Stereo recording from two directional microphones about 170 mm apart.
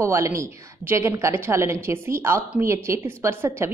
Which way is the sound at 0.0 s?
15° right (ahead or behind).